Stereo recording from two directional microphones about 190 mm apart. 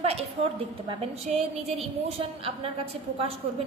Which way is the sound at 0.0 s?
30° right (ahead or behind).